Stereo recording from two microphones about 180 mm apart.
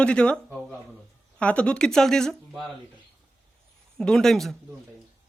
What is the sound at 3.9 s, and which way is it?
Speech, 5° left (ahead or behind).